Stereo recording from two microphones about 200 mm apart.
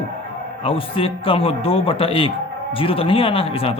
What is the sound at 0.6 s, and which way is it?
Speech, 25° left (ahead or behind).